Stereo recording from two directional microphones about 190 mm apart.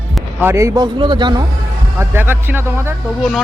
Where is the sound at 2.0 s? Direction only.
10° right (ahead or behind).